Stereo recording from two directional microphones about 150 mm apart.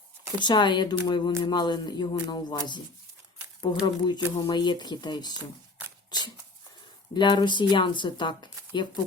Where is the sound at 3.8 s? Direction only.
30° left (ahead or behind).